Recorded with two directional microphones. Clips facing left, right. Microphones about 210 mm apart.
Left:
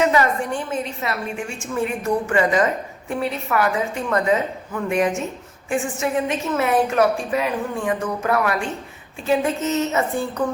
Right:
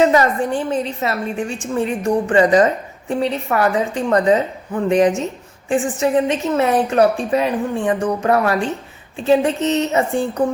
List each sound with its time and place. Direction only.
0.0 s a woman's voice: 35° right (ahead or behind)